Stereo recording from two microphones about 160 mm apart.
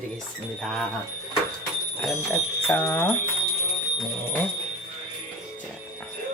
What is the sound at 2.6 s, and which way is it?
Speech, 15° left (ahead or behind).